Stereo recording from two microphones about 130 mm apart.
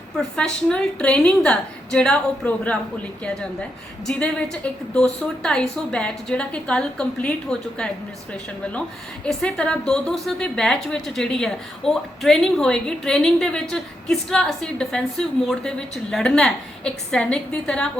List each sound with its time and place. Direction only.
0.2 s a woman's voice: 5° left (ahead or behind)
9.2 s a woman's voice: 10° left (ahead or behind)